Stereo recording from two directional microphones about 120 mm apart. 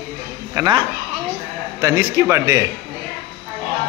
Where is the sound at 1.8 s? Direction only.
25° right (ahead or behind).